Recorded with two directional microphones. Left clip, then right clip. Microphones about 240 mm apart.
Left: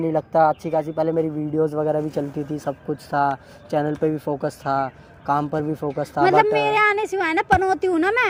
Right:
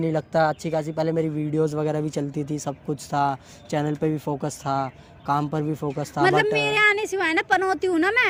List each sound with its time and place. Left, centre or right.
0.0 s a man's voice: right